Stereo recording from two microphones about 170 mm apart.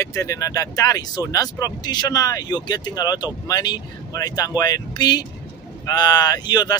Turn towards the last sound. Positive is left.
turn(degrees=25)  # may be behind; listen again after turning